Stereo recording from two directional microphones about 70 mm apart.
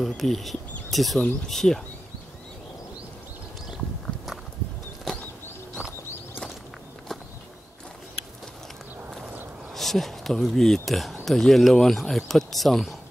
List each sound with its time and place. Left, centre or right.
0.0 s speech: centre
5.8 s a sound: right
9.8 s speech: centre